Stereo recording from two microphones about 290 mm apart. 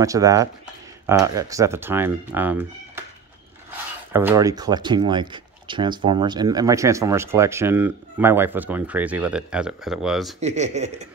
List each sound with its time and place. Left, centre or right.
0.0 s speech: centre
4.1 s speech: centre
10.4 s speech: right